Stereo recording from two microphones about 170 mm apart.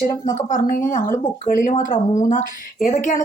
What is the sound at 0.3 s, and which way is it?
Speech, 50° left (ahead or behind).